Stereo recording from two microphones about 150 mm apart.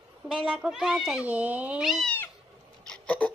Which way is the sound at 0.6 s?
5° right (ahead or behind).